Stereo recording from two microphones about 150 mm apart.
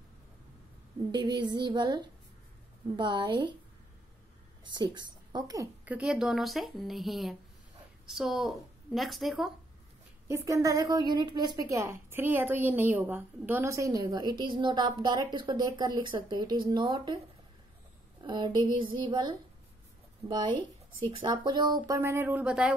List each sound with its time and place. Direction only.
1.1 s a woman's voice: 30° right (ahead or behind)
3.0 s a sound: 30° right (ahead or behind)
4.7 s a woman's voice: 30° right (ahead or behind)
5.9 s speech: 5° right (ahead or behind)
10.2 s a woman's voice: 20° right (ahead or behind)
18.2 s a sound: 30° right (ahead or behind)
21.2 s a woman's voice: 30° right (ahead or behind); by 22.8 s 5° right (ahead or behind)